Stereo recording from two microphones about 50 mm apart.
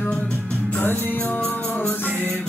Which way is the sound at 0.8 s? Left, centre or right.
Left.